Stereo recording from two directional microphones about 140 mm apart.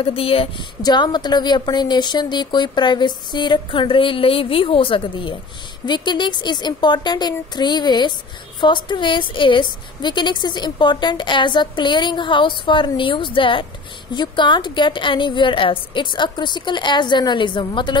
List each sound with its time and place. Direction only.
0.0 s a woman's voice: 40° left (ahead or behind)
0.8 s a woman's voice: 30° left (ahead or behind)